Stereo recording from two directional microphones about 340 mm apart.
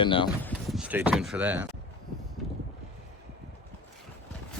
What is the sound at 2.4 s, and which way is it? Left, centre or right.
Vehicle, centre.